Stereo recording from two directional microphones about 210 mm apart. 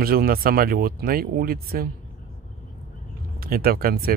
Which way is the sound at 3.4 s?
45° right (ahead or behind).